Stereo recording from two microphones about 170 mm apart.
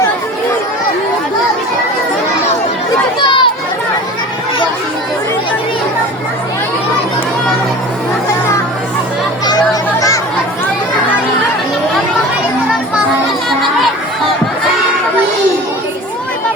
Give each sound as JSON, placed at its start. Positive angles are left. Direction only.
{"t": 3.2, "sound": "chatter", "side_deg": 25}